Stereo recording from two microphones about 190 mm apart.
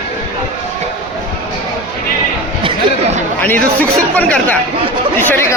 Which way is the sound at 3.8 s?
10° left (ahead or behind).